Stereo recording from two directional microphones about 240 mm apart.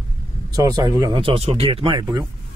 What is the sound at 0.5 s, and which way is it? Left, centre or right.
Speech, centre.